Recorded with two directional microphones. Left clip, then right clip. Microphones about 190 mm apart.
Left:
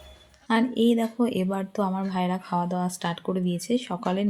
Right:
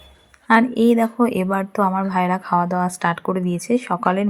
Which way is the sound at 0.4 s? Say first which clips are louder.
Right 8 dB; 15° right (ahead or behind).